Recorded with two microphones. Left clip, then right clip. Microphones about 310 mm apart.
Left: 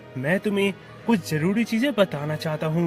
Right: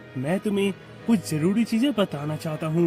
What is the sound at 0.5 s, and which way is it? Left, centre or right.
Speech, left.